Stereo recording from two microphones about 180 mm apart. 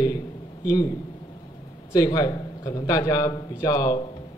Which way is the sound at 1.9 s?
20° left (ahead or behind).